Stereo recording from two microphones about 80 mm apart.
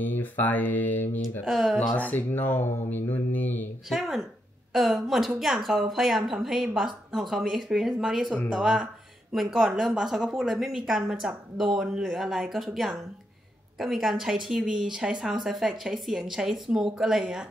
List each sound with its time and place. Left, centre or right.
0.0 s speech: left
1.4 s a woman's voice: centre
2.0 s speech: left
3.9 s a woman's voice: centre